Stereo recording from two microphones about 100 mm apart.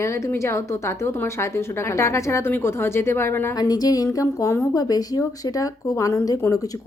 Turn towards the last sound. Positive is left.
turn(degrees=35)  # may be behind; listen again after turning